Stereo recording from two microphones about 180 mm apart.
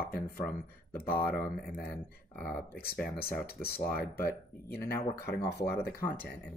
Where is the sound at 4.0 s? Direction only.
60° left (ahead or behind).